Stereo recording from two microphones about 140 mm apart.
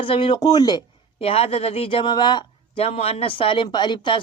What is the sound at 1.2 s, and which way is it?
Speech, 45° left (ahead or behind).